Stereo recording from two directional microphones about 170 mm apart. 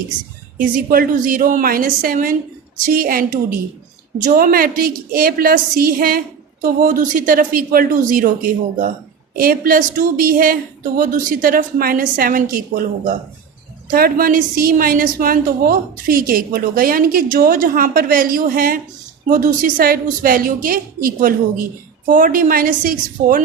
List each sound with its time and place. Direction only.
0.6 s a woman's voice: 55° right (ahead or behind)
4.3 s a woman's voice: 55° right (ahead or behind)
13.9 s a woman's voice: 60° right (ahead or behind)